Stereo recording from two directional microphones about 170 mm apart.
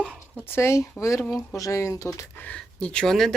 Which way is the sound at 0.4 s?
15° left (ahead or behind).